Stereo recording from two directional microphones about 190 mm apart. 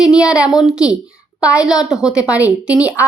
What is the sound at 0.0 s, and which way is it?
A woman's voice, 5° right (ahead or behind).